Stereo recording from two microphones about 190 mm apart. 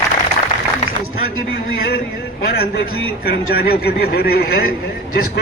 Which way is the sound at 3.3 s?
55° left (ahead or behind).